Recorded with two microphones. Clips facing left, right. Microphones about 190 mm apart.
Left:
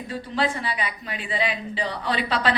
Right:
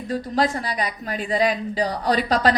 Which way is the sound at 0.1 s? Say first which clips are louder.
Right 4 dB; 40° right (ahead or behind).